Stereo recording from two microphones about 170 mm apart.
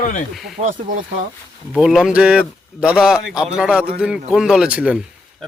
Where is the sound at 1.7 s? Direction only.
5° right (ahead or behind).